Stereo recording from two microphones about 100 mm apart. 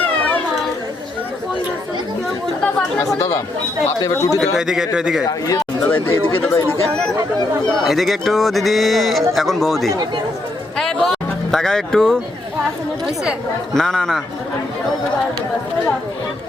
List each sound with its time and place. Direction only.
3.1 s a man's voice: 35° left (ahead or behind)
4.4 s speech: 5° right (ahead or behind)
5.2 s a man's voice: 35° left (ahead or behind)
5.9 s speech: 20° left (ahead or behind)
7.9 s speech: centre (ahead or behind)
10.8 s music: 5° left (ahead or behind)
13.7 s speech: 5° left (ahead or behind)